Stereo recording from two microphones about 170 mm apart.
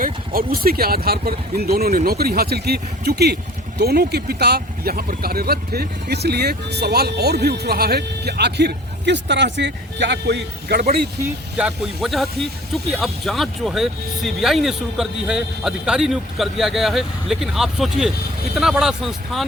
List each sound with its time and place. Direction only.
0.5 s speech: 60° right (ahead or behind)
11.5 s speech: 5° right (ahead or behind)